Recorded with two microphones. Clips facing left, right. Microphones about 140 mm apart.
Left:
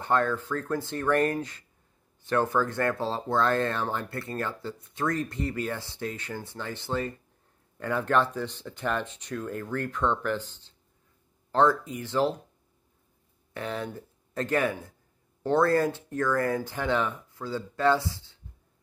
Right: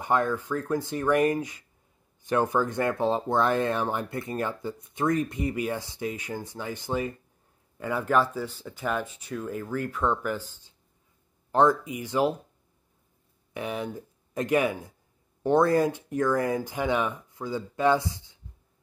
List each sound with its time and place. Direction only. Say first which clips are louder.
0.0 s speech: even; 15° right (ahead or behind)
13.5 s speech: right 1 dB; 15° right (ahead or behind)